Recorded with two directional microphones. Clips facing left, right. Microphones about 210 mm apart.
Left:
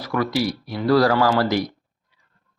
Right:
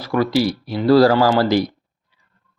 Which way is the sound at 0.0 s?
30° right (ahead or behind).